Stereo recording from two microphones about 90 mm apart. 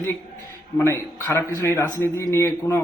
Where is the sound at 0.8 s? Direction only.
30° left (ahead or behind).